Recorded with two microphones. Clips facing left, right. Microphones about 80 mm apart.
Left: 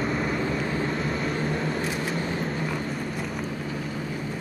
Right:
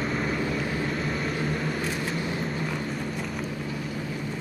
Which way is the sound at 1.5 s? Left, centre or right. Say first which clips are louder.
Left 2 dB; left.